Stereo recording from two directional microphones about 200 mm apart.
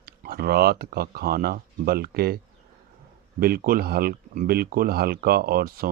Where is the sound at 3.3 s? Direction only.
45° right (ahead or behind).